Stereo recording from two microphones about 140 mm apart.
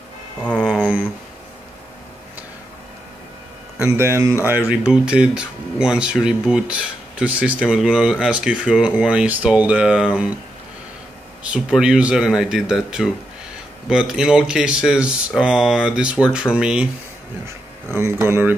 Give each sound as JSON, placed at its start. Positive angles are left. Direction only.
{"t": 0.4, "sound": "speech", "side_deg": 5}
{"t": 0.7, "sound": "a sound", "side_deg": -10}
{"t": 3.7, "sound": "speech", "side_deg": -15}
{"t": 11.4, "sound": "speech", "side_deg": -5}
{"t": 17.9, "sound": "speech", "side_deg": -20}